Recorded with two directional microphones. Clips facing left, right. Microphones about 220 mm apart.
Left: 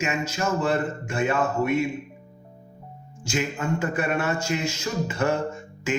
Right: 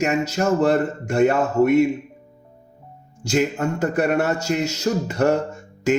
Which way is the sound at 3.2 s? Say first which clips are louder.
Right 7 dB; 45° right (ahead or behind).